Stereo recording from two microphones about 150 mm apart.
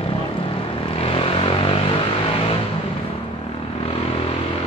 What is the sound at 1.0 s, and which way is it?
Vehicle, 35° left (ahead or behind).